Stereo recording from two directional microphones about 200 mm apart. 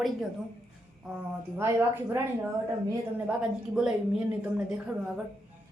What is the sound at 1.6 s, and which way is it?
Speech, 15° right (ahead or behind).